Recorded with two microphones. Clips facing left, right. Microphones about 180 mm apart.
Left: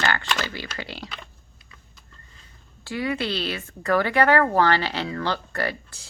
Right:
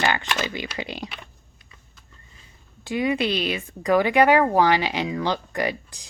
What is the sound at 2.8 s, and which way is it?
Speech, 20° right (ahead or behind).